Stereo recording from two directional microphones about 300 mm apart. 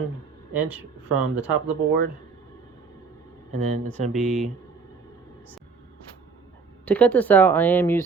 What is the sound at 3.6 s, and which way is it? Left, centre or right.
Speech, right.